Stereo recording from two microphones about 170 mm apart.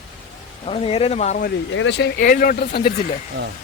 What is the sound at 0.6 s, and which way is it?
Speech, 35° left (ahead or behind).